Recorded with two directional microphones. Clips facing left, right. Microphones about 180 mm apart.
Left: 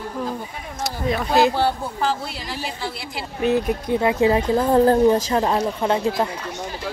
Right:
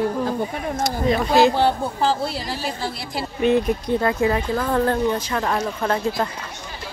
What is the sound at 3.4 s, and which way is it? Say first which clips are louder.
Speech: right 1 dB; 5° left (ahead or behind).